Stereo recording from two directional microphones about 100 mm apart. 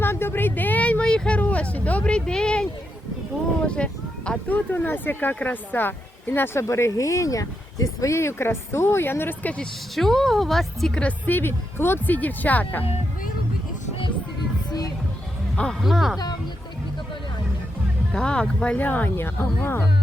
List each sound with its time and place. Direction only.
0.0 s vehicle: 25° left (ahead or behind); by 2.6 s 10° left (ahead or behind)
3.8 s speech: 10° left (ahead or behind)
9.9 s speech: 5° left (ahead or behind)
14.7 s music: 40° left (ahead or behind)
15.8 s speech: centre (ahead or behind)
16.1 s speech: 40° left (ahead or behind)
18.1 s speech: 10° left (ahead or behind)